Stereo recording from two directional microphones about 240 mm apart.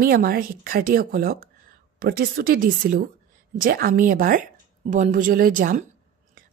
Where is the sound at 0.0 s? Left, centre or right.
Right.